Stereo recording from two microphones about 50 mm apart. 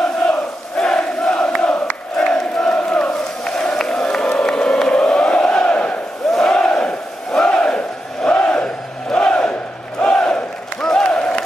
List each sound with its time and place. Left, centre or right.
0.0 s crowd: centre
6.5 s battle cry: centre